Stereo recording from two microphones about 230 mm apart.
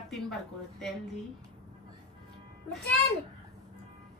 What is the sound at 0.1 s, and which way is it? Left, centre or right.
Speech, centre.